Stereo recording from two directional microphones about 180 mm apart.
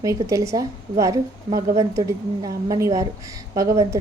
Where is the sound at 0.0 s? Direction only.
15° right (ahead or behind).